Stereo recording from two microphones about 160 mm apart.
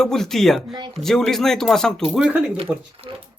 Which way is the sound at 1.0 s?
Centre (ahead or behind).